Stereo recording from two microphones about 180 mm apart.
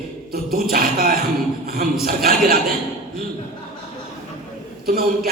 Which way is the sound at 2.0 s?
55° right (ahead or behind).